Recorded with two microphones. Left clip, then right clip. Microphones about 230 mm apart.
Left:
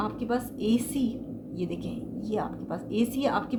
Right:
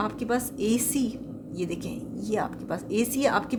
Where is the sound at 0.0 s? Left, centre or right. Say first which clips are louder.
Right 2 dB; right.